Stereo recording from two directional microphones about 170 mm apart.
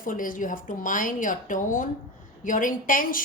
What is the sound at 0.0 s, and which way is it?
A woman's voice, 55° left (ahead or behind).